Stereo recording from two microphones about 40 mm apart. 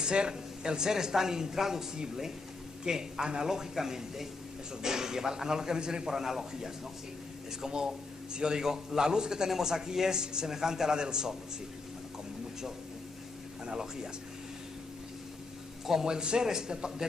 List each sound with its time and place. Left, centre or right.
0.0 s speech: right
15.9 s speech: centre